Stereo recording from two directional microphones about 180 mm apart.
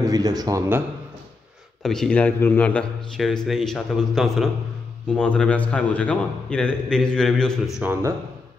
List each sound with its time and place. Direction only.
0.0 s a man's voice: 20° right (ahead or behind)
1.8 s speech: centre (ahead or behind)
7.8 s speech: 10° right (ahead or behind)